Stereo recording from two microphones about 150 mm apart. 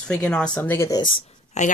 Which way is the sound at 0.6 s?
15° left (ahead or behind).